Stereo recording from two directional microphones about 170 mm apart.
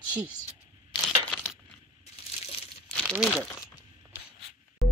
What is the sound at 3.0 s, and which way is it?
Speech, centre (ahead or behind).